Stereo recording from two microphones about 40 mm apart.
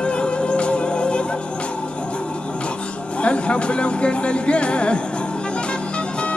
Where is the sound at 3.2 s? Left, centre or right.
Left.